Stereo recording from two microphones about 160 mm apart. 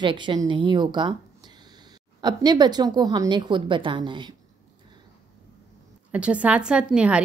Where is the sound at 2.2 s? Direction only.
25° right (ahead or behind).